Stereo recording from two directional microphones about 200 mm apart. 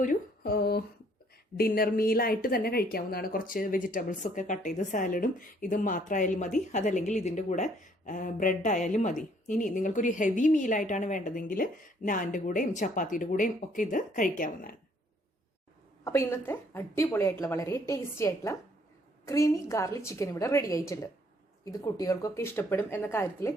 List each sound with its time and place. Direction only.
0.0 s a sound: 45° left (ahead or behind)
1.5 s a woman's voice: 50° left (ahead or behind)
16.0 s a woman's voice: 15° left (ahead or behind)